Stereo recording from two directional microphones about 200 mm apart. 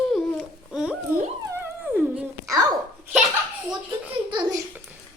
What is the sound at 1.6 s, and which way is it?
Dog, 5° right (ahead or behind).